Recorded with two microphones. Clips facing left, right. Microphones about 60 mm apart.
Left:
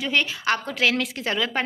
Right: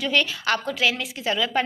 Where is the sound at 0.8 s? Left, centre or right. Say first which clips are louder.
Left 1 dB; left.